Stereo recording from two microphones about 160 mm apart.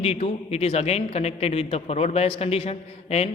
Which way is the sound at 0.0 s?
40° left (ahead or behind).